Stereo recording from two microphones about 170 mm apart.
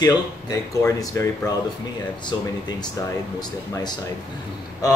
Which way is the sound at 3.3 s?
25° left (ahead or behind).